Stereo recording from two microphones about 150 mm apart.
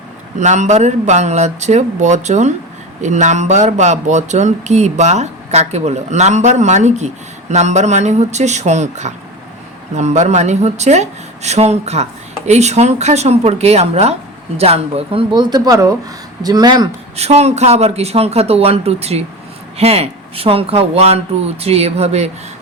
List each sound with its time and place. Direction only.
0.3 s speech: 50° right (ahead or behind); by 16.9 s 30° right (ahead or behind)
17.2 s speech: 45° right (ahead or behind)